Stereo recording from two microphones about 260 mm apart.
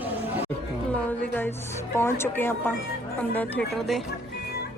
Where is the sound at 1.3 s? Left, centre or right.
Centre.